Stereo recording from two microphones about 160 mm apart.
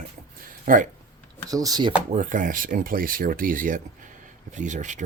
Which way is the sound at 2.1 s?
55° right (ahead or behind).